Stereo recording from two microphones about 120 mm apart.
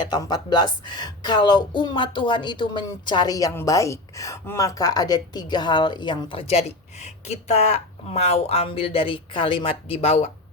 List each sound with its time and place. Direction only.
0.0 s a woman's voice: 35° left (ahead or behind); by 10.2 s 55° left (ahead or behind)